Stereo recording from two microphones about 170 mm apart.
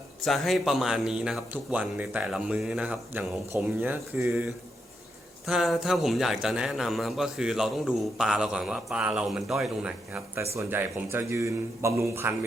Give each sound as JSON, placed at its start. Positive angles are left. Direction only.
{"t": 0.3, "sound": "a man's voice", "side_deg": 0}
{"t": 4.3, "sound": "a man's voice", "side_deg": 0}